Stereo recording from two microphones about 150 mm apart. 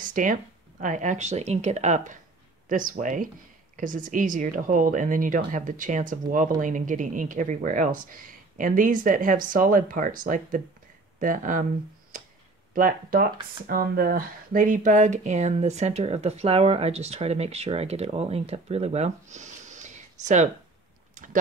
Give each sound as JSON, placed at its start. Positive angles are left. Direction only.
{"t": 0.0, "sound": "speech", "side_deg": -60}
{"t": 2.7, "sound": "speech", "side_deg": -60}
{"t": 12.7, "sound": "speech", "side_deg": -70}
{"t": 21.1, "sound": "a sound", "side_deg": -60}